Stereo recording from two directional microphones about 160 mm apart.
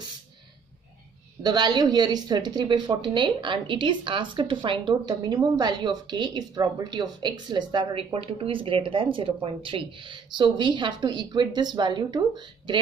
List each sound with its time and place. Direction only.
1.4 s speech: 25° right (ahead or behind)